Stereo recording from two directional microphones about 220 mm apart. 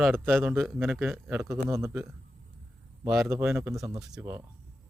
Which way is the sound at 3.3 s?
10° right (ahead or behind).